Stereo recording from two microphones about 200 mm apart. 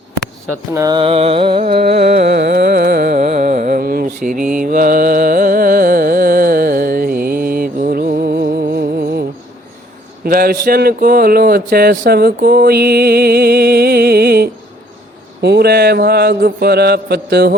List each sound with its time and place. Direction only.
0.7 s music: 20° right (ahead or behind)
1.8 s carnatic music: 55° right (ahead or behind)
2.2 s music: 55° right (ahead or behind)
4.6 s carnatic music: 45° right (ahead or behind)
10.2 s speech: 45° right (ahead or behind)